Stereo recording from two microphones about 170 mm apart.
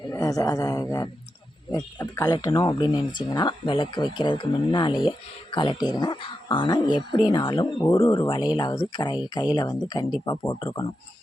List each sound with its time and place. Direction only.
0.0 s a man's voice: 20° left (ahead or behind)